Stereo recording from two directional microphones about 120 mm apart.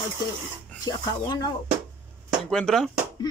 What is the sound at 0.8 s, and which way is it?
Speech, 35° left (ahead or behind).